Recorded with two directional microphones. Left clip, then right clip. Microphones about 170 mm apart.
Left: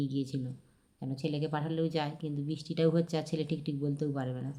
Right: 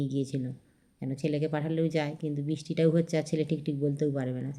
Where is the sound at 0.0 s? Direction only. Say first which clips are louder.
Right 3 dB; 20° right (ahead or behind).